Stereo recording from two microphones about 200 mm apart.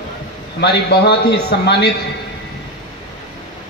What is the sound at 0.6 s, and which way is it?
A man's voice, 55° left (ahead or behind).